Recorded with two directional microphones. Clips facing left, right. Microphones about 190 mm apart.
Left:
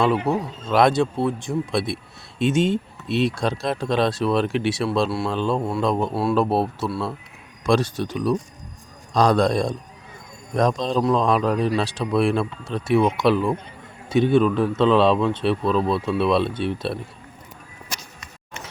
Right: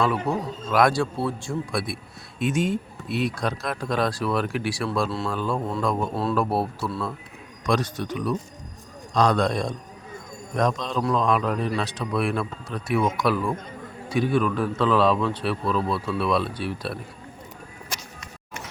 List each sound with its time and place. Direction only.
0.3 s speech: 35° left (ahead or behind)
0.7 s a man's voice: 25° left (ahead or behind)